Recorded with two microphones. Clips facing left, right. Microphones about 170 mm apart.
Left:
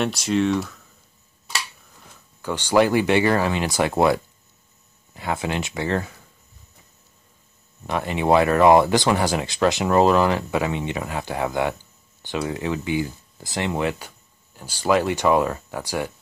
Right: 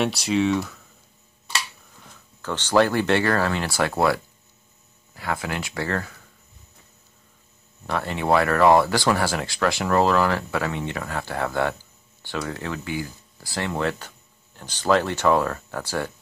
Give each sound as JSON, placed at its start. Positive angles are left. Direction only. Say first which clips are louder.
{"t": 0.0, "sound": "speech", "louder": "even", "side_deg": 0}
{"t": 2.4, "sound": "speech", "louder": "left 1 dB", "side_deg": 10}
{"t": 7.8, "sound": "speech", "louder": "left 3 dB", "side_deg": 15}